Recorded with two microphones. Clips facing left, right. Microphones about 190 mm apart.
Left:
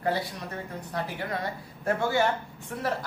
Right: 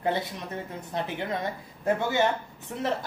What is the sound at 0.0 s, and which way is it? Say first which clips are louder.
Speech: even; 20° right (ahead or behind).